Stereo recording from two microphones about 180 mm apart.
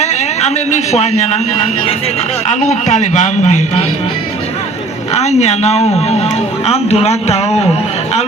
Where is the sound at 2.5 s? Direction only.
40° left (ahead or behind).